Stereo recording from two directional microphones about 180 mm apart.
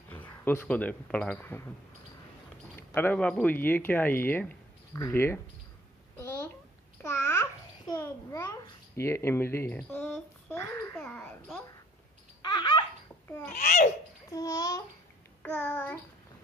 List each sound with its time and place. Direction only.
0.1 s speech: 10° left (ahead or behind)
2.9 s speech: 10° left (ahead or behind)
6.1 s a sound: 15° left (ahead or behind)
7.0 s babbling: 15° left (ahead or behind)
11.0 s babbling: 5° left (ahead or behind)
12.4 s babbling: 25° left (ahead or behind)
13.6 s a child's voice: 45° left (ahead or behind)
14.3 s a child's voice: 20° left (ahead or behind)